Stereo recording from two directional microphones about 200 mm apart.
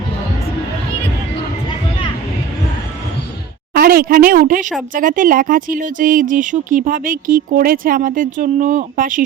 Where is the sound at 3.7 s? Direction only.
50° right (ahead or behind).